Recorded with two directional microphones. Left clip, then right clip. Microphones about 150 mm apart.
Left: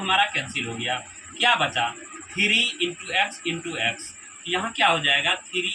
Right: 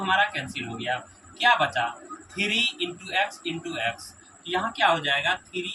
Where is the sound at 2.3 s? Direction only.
15° right (ahead or behind).